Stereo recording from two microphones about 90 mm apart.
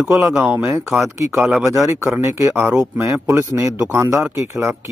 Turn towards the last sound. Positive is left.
turn(degrees=-30)  # may be behind; listen again after turning